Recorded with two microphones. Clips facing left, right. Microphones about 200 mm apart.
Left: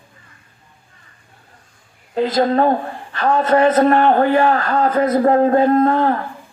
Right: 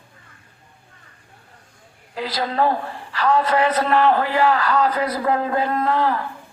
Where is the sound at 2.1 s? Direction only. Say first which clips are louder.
Left 8 dB; 40° left (ahead or behind).